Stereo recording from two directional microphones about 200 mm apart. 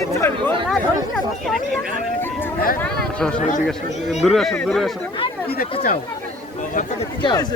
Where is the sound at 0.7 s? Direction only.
Centre (ahead or behind).